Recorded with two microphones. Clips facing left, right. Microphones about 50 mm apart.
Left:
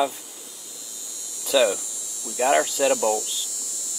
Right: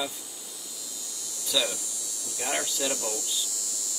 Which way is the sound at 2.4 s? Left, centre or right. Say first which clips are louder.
Left 12 dB; centre.